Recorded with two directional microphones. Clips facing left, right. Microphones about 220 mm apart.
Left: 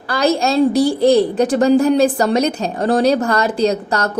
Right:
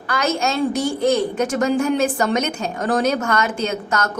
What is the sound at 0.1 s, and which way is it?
A woman's voice, 35° left (ahead or behind).